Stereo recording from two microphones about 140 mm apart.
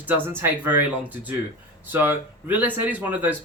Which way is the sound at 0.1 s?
15° right (ahead or behind).